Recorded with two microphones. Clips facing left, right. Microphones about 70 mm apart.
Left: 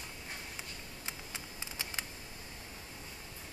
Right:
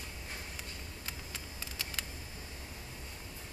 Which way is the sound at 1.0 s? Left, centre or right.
Centre.